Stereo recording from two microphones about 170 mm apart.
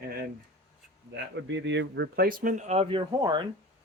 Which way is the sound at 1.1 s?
90° right.